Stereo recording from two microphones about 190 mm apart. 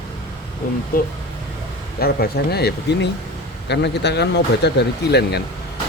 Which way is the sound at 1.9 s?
55° left (ahead or behind).